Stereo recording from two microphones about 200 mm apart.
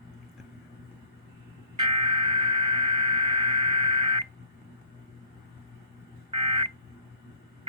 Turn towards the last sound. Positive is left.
turn(degrees=-25)  # may be behind; listen again after turning